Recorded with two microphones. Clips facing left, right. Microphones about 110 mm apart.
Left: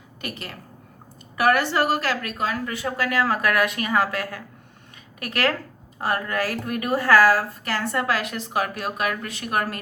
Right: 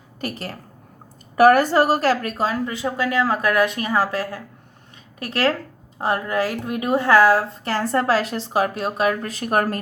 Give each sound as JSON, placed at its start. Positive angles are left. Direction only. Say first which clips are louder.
{"t": 0.2, "sound": "a woman's voice", "louder": "right 5 dB", "side_deg": -35}